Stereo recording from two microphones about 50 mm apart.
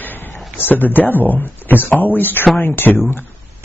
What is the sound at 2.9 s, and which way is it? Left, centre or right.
Speech, left.